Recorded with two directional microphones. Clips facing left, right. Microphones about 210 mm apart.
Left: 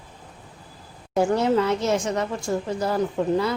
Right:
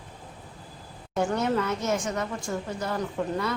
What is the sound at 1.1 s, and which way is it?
A woman's voice, 30° left (ahead or behind).